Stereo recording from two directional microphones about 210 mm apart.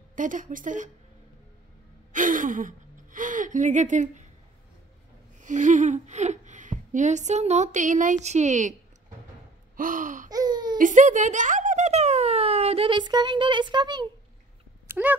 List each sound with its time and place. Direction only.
0.1 s speech: 40° right (ahead or behind)
2.1 s a sound: 40° right (ahead or behind)
5.4 s speech: 35° right (ahead or behind)
9.8 s gasp: 40° right (ahead or behind)
10.3 s baby cry: 20° right (ahead or behind)
10.8 s speech: 35° right (ahead or behind); by 14.0 s 20° right (ahead or behind)
14.9 s a sound: 10° right (ahead or behind)